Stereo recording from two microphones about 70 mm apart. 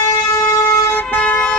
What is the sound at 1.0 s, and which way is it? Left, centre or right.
Vehicle, left.